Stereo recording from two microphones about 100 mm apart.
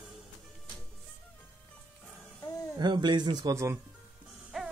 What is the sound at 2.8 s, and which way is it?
Speech, 50° right (ahead or behind).